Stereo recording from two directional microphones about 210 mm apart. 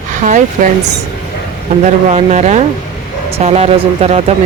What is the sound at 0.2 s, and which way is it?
Speech, 35° right (ahead or behind).